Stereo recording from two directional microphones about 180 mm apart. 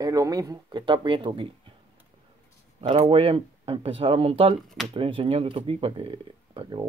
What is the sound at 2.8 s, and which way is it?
Speech, 30° right (ahead or behind).